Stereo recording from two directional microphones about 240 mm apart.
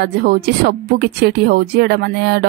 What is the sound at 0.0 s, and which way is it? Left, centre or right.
A woman's voice, right.